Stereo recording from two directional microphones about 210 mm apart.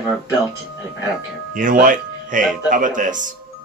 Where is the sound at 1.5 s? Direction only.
40° right (ahead or behind).